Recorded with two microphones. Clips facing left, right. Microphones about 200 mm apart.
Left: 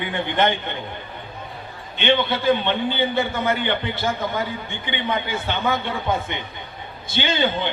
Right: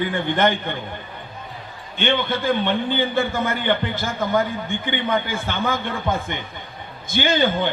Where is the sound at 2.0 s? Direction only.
50° right (ahead or behind).